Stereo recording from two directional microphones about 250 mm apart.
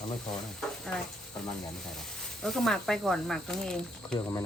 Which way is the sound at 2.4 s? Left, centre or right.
Centre.